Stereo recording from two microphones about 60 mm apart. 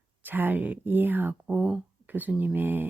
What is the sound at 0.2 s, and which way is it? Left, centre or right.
Speech, right.